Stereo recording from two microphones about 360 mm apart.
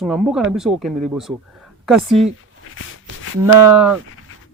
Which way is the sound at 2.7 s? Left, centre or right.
Left.